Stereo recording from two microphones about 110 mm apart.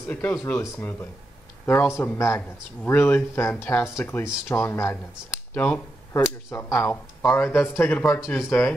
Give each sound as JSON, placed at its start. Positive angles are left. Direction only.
{"t": 0.1, "sound": "speech", "side_deg": 15}
{"t": 5.5, "sound": "speech", "side_deg": 15}
{"t": 6.5, "sound": "speech", "side_deg": 25}